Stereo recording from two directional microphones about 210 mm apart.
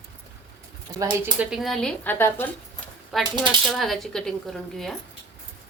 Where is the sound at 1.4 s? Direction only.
Centre (ahead or behind).